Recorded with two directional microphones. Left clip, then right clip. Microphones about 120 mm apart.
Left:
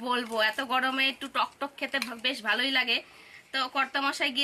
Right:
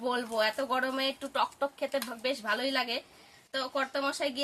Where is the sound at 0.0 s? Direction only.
35° right (ahead or behind).